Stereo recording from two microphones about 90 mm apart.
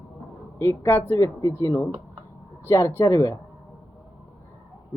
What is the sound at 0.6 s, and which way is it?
Speech, 30° left (ahead or behind).